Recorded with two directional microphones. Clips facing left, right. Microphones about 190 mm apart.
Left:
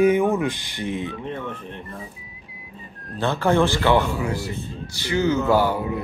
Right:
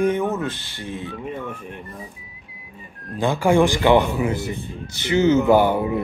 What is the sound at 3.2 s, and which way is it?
Speech, 10° right (ahead or behind).